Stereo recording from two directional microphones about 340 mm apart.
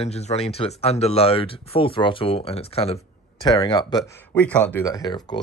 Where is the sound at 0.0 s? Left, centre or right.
Centre.